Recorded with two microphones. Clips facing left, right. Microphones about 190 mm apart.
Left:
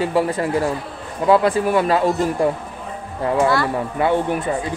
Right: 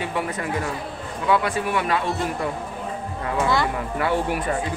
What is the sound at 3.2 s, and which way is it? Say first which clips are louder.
Speech: left 5 dB; 30° left (ahead or behind).